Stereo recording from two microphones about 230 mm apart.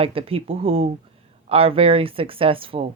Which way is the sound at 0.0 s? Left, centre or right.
Right.